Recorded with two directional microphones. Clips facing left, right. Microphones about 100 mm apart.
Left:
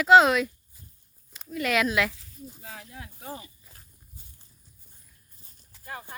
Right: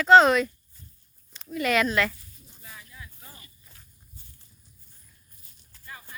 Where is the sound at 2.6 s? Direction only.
90° left; by 3.5 s 70° left (ahead or behind).